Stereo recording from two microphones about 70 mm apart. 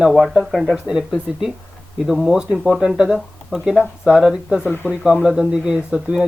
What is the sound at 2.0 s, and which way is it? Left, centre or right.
Speech, centre.